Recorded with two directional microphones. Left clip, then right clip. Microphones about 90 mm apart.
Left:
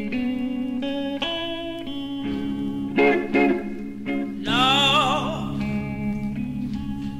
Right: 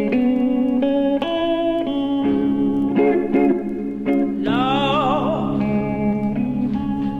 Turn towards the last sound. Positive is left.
turn(degrees=20)  # may be behind; listen again after turning